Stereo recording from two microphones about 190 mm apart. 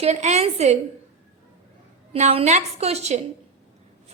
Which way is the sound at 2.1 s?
35° right (ahead or behind).